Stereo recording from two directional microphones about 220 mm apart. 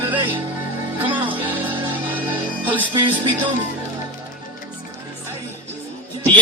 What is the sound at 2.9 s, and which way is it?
Speech, 20° right (ahead or behind).